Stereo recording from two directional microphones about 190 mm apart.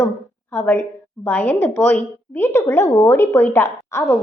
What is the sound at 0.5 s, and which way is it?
A woman's voice, 10° left (ahead or behind).